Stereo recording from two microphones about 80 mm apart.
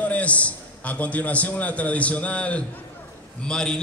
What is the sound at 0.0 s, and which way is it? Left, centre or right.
A man's voice, centre.